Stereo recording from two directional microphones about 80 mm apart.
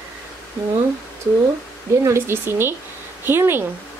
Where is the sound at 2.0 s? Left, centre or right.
Right.